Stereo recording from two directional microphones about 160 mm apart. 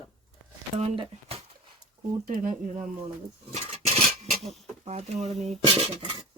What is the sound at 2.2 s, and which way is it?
Speech, 55° right (ahead or behind).